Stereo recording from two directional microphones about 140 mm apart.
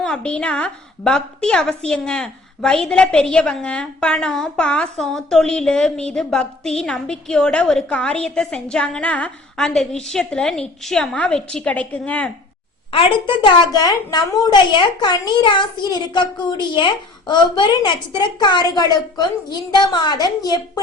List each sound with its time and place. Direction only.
0.0 s a woman's voice: 5° left (ahead or behind)
12.9 s a woman's voice: 40° left (ahead or behind)